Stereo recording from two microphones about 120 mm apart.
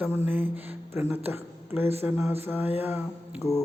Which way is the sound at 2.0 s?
20° right (ahead or behind).